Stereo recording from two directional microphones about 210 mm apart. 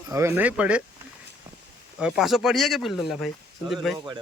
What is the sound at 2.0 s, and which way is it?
Speech, centre (ahead or behind).